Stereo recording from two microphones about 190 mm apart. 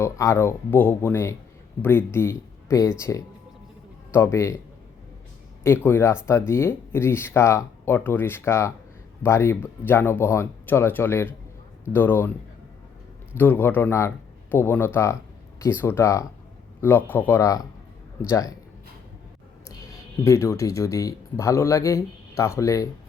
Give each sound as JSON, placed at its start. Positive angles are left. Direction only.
{"t": 0.0, "sound": "speech", "side_deg": 15}
{"t": 5.6, "sound": "speech", "side_deg": 10}
{"t": 13.3, "sound": "speech", "side_deg": 10}
{"t": 19.6, "sound": "speech", "side_deg": 20}